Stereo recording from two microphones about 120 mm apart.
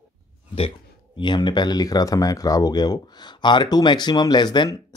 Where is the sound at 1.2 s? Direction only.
40° left (ahead or behind).